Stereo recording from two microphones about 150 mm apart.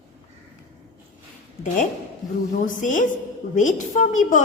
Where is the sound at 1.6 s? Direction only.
60° left (ahead or behind).